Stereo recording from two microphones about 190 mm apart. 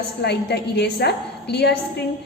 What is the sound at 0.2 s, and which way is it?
A woman's voice, 60° left (ahead or behind).